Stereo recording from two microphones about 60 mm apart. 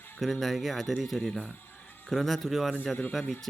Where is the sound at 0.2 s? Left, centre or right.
Centre.